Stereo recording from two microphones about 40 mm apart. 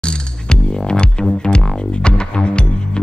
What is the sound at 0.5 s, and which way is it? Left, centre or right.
Music, left.